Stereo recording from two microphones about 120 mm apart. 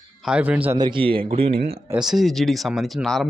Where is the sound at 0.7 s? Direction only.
40° right (ahead or behind).